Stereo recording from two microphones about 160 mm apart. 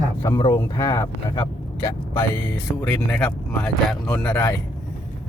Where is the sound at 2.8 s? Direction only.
5° left (ahead or behind).